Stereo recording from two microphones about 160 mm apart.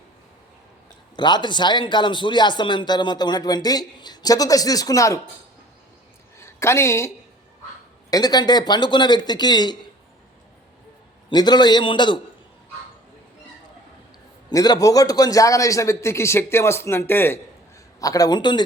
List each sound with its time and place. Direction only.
1.1 s speech: 30° left (ahead or behind)
6.4 s a woman's voice: 15° left (ahead or behind)
8.1 s speech: 25° left (ahead or behind)
11.3 s speech: 25° left (ahead or behind)
14.5 s speech: 25° left (ahead or behind)